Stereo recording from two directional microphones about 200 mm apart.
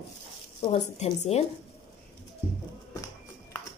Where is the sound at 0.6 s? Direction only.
30° left (ahead or behind).